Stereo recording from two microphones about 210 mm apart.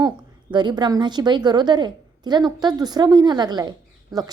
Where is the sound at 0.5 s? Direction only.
20° right (ahead or behind).